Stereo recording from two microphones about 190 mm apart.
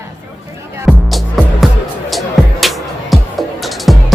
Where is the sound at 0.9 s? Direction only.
Centre (ahead or behind).